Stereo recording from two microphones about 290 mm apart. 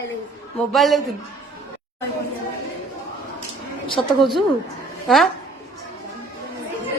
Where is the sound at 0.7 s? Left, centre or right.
Centre.